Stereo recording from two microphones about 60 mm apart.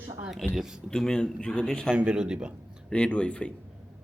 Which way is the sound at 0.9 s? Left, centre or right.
Centre.